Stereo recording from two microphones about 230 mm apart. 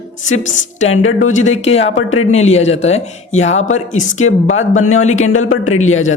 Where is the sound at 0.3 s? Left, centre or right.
Left.